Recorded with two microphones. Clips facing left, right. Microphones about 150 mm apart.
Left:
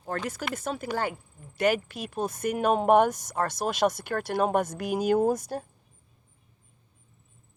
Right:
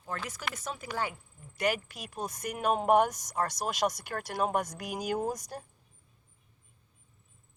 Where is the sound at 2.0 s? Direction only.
25° left (ahead or behind).